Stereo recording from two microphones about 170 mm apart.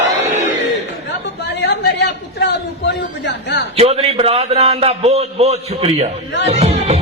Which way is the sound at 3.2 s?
90° left.